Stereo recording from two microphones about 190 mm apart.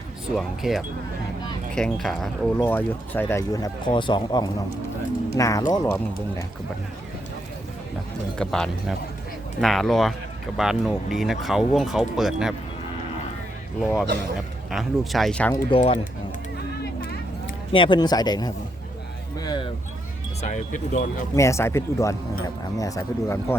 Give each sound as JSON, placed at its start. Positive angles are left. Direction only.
{"t": 0.3, "sound": "speech", "side_deg": 0}
{"t": 8.4, "sound": "speech", "side_deg": 5}
{"t": 14.7, "sound": "speech", "side_deg": 0}
{"t": 15.7, "sound": "speech", "side_deg": 30}
{"t": 17.7, "sound": "speech", "side_deg": 25}
{"t": 19.4, "sound": "a sound", "side_deg": 25}
{"t": 20.4, "sound": "speech", "side_deg": 40}
{"t": 21.3, "sound": "speech", "side_deg": 15}